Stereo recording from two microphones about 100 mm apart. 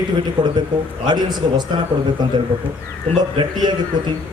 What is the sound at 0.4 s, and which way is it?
A man's voice, 50° right (ahead or behind).